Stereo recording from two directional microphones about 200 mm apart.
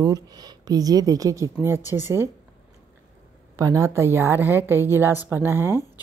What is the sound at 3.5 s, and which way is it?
A woman's voice, 15° right (ahead or behind).